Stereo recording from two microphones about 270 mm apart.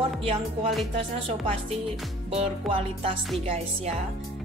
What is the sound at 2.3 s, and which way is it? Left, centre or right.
Speech, right.